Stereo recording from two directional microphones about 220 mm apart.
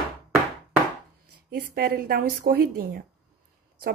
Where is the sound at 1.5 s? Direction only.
45° right (ahead or behind).